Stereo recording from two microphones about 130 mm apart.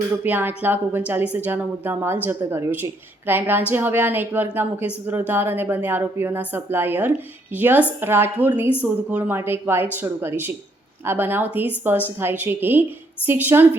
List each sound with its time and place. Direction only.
0.2 s a woman's voice: 15° right (ahead or behind)